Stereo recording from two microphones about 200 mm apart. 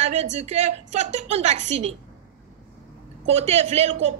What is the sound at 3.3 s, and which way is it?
Speech, 35° right (ahead or behind).